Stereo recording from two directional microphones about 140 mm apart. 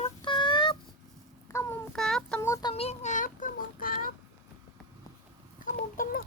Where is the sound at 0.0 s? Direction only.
35° left (ahead or behind).